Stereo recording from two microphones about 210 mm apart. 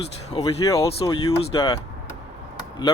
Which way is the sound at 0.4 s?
15° left (ahead or behind).